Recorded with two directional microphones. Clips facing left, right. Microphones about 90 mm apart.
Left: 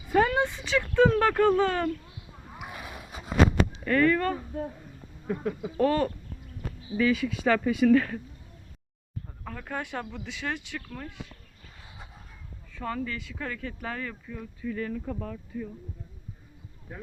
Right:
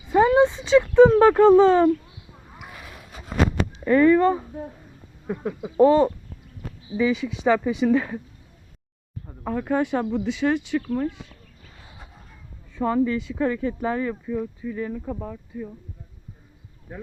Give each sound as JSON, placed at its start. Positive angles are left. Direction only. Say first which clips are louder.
{"t": 0.0, "sound": "a sound", "louder": "right 7 dB", "side_deg": -20}
{"t": 2.3, "sound": "a sound", "louder": "left 2 dB", "side_deg": 0}
{"t": 2.6, "sound": "boat", "louder": "left 2 dB", "side_deg": 10}
{"t": 3.8, "sound": "speech", "louder": "right 8 dB", "side_deg": -15}
{"t": 9.2, "sound": "speech", "louder": "right 14 dB", "side_deg": -25}
{"t": 12.7, "sound": "speech", "louder": "right 11 dB", "side_deg": -20}